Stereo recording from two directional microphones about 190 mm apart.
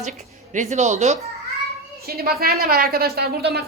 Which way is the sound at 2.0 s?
55° right (ahead or behind).